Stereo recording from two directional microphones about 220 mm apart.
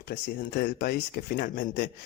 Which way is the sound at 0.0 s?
50° left (ahead or behind).